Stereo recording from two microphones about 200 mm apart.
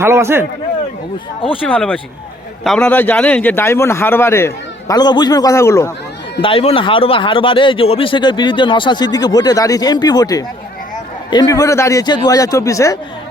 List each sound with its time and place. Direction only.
0.0 s a man's voice: 15° right (ahead or behind)
1.4 s speech: 25° left (ahead or behind)
1.6 s a man's voice: 5° left (ahead or behind)
6.4 s a man's voice: 30° left (ahead or behind)